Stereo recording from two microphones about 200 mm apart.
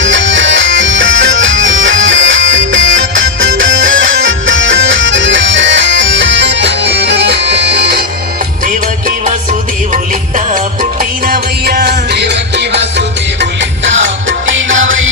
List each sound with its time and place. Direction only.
0.0 s music: 65° right (ahead or behind); by 8.0 s 50° right (ahead or behind)
9.9 s music: 40° right (ahead or behind); by 15.1 s 75° right (ahead or behind)